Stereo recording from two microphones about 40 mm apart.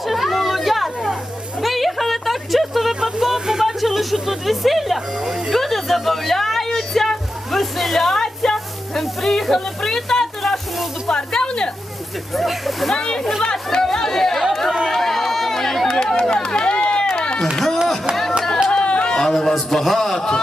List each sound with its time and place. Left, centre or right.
0.0 s chatter: centre
1.6 s a sound: centre
4.9 s speech: centre
5.5 s a sound: centre
11.1 s snake: left
12.3 s a man's voice: centre
12.9 s speech: centre
13.8 s chatter: centre
14.9 s run: centre
15.9 s run: left
18.1 s music: centre
18.7 s a sound: left
19.3 s a man's voice: centre
20.1 s speech: centre